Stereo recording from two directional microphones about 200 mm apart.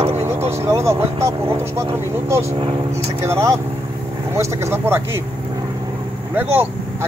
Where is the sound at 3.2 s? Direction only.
15° right (ahead or behind).